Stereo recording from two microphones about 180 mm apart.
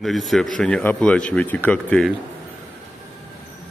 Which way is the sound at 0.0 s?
Centre (ahead or behind).